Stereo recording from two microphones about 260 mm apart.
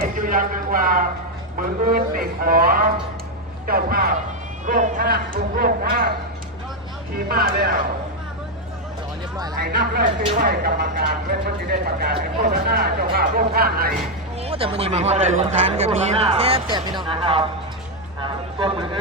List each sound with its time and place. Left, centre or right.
0.0 s a sound: right
1.5 s speech: right
7.3 s speech: right
9.6 s speech: right
14.4 s speech: right
18.2 s a sound: centre